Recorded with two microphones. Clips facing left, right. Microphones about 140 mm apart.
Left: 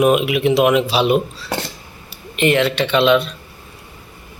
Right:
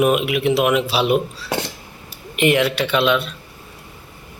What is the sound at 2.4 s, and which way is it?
Speech, 15° right (ahead or behind).